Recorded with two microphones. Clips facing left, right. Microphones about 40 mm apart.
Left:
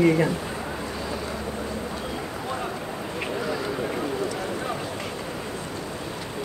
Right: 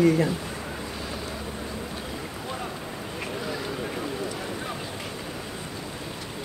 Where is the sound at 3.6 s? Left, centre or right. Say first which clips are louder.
Left 4 dB; centre.